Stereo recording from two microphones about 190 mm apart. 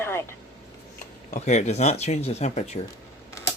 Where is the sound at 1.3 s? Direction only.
35° left (ahead or behind).